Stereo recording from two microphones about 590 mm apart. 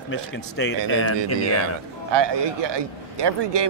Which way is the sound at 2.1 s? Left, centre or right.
Right.